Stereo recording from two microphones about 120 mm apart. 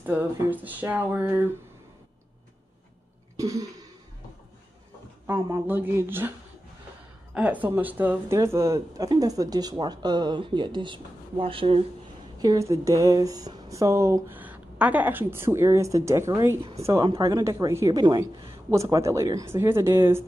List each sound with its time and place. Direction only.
0.0 s speech: 15° right (ahead or behind)
3.3 s a sound: 30° right (ahead or behind)
5.2 s speech: 20° right (ahead or behind)
7.3 s speech: 15° right (ahead or behind); by 11.8 s 50° right (ahead or behind)
12.4 s speech: 30° right (ahead or behind)